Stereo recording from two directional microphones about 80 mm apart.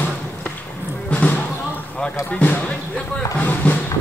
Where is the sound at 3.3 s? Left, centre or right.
Centre.